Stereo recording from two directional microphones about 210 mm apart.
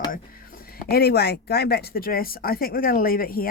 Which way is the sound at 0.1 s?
45° left (ahead or behind).